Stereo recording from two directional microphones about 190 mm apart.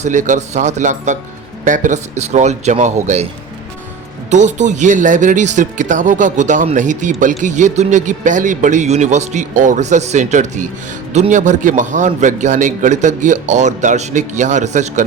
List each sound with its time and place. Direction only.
0.0 s speech: 40° right (ahead or behind)
4.3 s speech: 40° right (ahead or behind)